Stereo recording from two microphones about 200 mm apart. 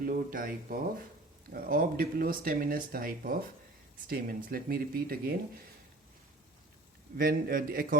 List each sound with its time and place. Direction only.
0.0 s speech: 45° right (ahead or behind)
7.2 s speech: 45° right (ahead or behind)